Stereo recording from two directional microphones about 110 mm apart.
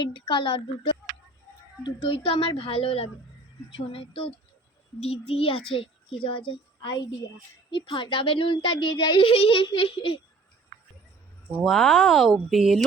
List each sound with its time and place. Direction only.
0.0 s speech: 45° left (ahead or behind)
7.7 s speech: 50° left (ahead or behind)
11.6 s speech: centre (ahead or behind)